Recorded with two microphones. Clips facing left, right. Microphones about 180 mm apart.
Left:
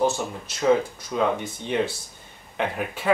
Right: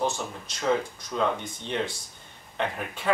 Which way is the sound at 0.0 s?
5° left (ahead or behind).